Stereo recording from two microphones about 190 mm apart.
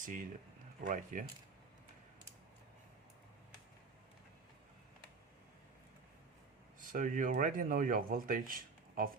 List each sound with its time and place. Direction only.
0.0 s speech: 45° right (ahead or behind)
6.7 s speech: 45° right (ahead or behind)